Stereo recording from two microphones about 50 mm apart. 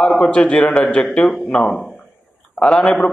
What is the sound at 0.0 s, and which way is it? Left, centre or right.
A man's voice, centre.